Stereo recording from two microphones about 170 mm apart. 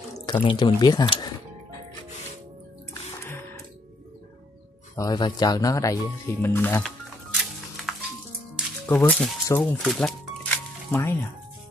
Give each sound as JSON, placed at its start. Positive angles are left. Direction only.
{"t": 0.3, "sound": "speech", "side_deg": 30}
{"t": 2.9, "sound": "music", "side_deg": 15}
{"t": 4.9, "sound": "speech", "side_deg": 20}
{"t": 7.9, "sound": "music", "side_deg": 0}
{"t": 8.8, "sound": "speech", "side_deg": 10}